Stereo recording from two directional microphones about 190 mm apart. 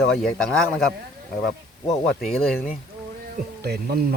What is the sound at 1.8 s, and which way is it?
Speech, 35° left (ahead or behind).